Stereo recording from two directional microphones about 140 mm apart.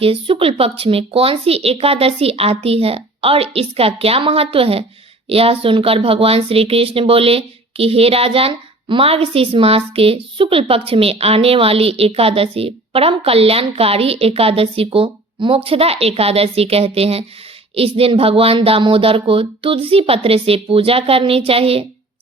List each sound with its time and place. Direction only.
0.0 s speech: 40° right (ahead or behind)